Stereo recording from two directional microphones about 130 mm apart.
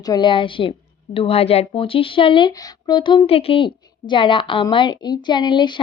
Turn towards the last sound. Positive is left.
turn(degrees=35)  # may be behind; listen again after turning